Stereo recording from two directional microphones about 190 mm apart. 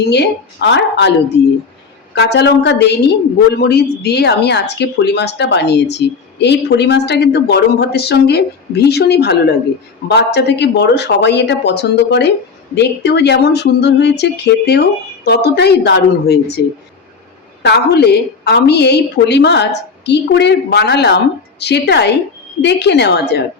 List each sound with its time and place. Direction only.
0.1 s speech: 65° left (ahead or behind)
2.1 s speech: 60° left (ahead or behind)
17.6 s speech: 60° left (ahead or behind)